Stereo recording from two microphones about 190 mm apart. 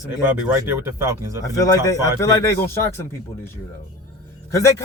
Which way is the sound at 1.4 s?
20° left (ahead or behind).